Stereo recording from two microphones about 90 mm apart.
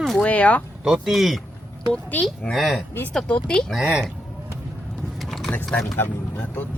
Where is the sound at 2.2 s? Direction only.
5° left (ahead or behind).